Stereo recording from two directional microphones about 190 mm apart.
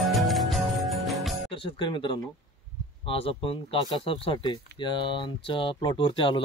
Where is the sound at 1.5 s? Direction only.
25° left (ahead or behind).